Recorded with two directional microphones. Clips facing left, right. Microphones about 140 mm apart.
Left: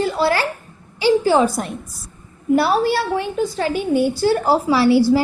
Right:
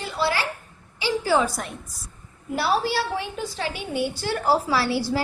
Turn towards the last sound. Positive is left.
turn(degrees=20)  # may be behind; listen again after turning